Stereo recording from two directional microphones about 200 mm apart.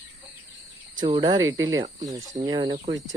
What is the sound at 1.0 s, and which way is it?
Speech, 25° right (ahead or behind).